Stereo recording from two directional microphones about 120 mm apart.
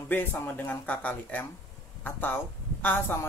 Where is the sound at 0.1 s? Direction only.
15° left (ahead or behind).